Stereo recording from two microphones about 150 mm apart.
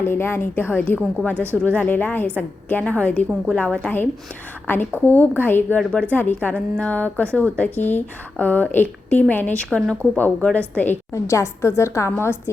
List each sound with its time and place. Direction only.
0.0 s a woman's voice: 15° left (ahead or behind)